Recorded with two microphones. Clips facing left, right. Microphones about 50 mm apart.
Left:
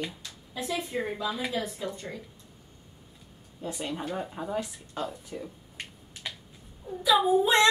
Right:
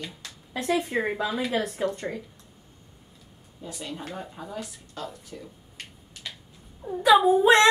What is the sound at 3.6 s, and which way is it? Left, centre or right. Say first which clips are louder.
Speech: left 3 dB; left.